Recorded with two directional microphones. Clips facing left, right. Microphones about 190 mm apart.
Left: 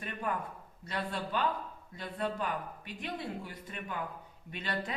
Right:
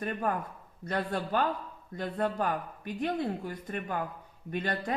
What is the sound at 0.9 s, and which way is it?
A woman's voice, 55° right (ahead or behind).